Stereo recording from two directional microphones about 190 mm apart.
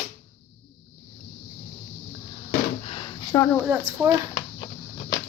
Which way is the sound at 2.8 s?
25° left (ahead or behind).